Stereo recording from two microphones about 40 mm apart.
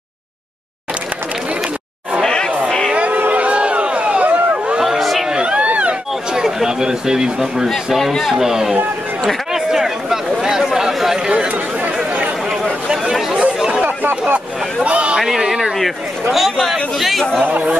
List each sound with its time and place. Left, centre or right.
2.2 s chatter: centre
2.9 s a sound: right
4.7 s a sound: centre
5.3 s a sound: right
6.3 s a man's voice: centre
7.6 s a man's voice: centre
8.4 s speech: centre
9.5 s chatter: centre
11.2 s chatter: right
12.9 s chatter: centre
14.8 s speech: right
15.1 s a man's voice: centre